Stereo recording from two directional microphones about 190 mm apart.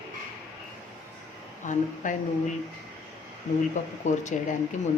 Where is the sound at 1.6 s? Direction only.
40° left (ahead or behind).